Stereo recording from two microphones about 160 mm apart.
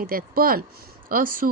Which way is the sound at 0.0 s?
65° right (ahead or behind).